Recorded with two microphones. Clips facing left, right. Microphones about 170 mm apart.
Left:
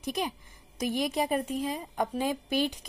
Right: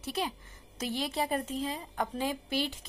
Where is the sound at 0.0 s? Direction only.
15° left (ahead or behind).